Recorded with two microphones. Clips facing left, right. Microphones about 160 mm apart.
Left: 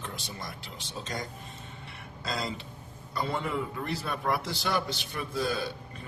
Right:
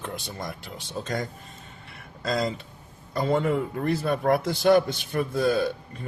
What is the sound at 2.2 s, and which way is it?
Speech, 45° right (ahead or behind).